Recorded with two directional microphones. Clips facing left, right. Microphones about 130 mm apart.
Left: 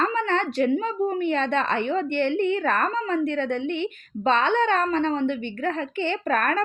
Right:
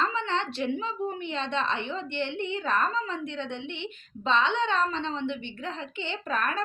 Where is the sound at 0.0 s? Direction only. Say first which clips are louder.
Left 5 dB; 50° left (ahead or behind).